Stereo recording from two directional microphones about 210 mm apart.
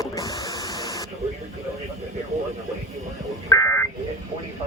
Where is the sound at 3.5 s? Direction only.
15° left (ahead or behind).